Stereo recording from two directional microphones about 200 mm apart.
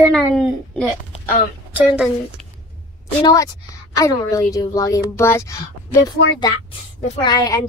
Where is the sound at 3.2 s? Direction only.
15° left (ahead or behind).